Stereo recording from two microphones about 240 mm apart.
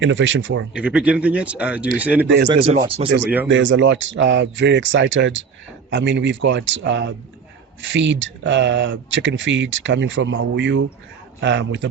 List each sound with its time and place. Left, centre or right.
0.0 s speech: right
0.7 s speech: centre
2.2 s speech: right
3.2 s speech: centre
3.5 s speech: right